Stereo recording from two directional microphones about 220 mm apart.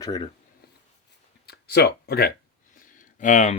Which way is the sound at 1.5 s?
45° left (ahead or behind).